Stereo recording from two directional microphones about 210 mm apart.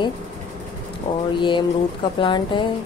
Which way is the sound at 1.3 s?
20° left (ahead or behind).